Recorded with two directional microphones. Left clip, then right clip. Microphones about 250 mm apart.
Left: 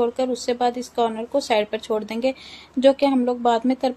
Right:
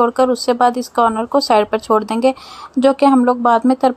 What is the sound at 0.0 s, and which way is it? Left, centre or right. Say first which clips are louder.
Speech: right 8 dB; centre.